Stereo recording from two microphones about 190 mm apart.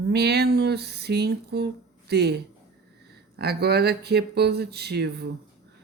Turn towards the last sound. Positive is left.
turn(degrees=-60)  # may be behind; listen again after turning